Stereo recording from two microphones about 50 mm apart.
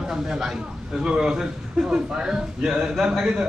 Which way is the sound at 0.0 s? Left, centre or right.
Centre.